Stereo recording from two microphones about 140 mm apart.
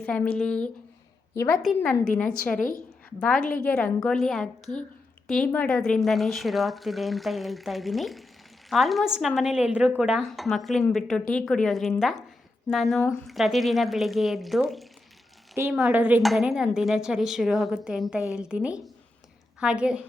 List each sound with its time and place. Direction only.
0.0 s a woman's voice: 10° left (ahead or behind)
2.2 s a woman's voice: 90° left
3.2 s a woman's voice: 5° left (ahead or behind)
15.6 s speech: 15° right (ahead or behind)
16.2 s a woman's voice: centre (ahead or behind)